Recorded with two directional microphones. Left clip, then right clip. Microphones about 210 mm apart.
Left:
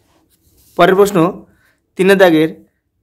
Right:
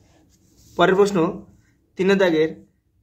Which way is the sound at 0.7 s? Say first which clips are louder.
Left 7 dB; 35° left (ahead or behind).